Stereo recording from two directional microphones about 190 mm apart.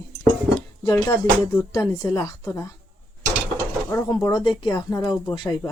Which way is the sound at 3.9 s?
20° left (ahead or behind).